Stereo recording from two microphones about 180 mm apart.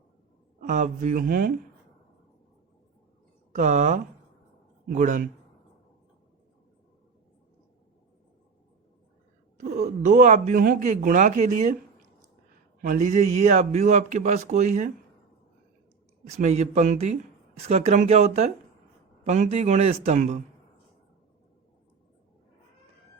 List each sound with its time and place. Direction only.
0.6 s speech: 45° right (ahead or behind)
3.5 s speech: 45° right (ahead or behind)
9.6 s speech: 45° right (ahead or behind)
12.8 s speech: 45° right (ahead or behind)
16.3 s speech: 40° right (ahead or behind)